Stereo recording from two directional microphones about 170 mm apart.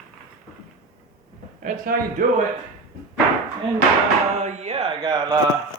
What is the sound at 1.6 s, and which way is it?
Speech, 55° right (ahead or behind).